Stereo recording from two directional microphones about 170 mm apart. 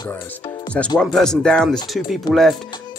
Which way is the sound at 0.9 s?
5° left (ahead or behind).